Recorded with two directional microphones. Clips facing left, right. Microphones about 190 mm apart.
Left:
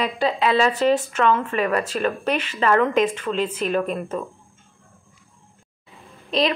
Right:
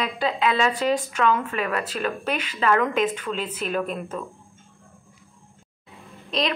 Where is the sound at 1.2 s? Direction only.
5° right (ahead or behind).